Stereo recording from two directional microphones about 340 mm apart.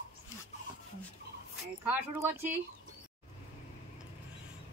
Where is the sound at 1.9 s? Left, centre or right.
Centre.